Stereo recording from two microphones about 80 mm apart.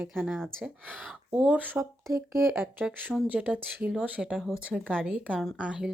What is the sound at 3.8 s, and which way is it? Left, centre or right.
Speech, centre.